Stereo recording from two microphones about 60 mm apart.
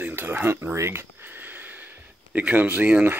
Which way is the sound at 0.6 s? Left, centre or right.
Right.